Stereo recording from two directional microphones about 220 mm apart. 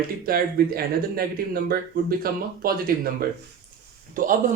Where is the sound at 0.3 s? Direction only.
40° right (ahead or behind).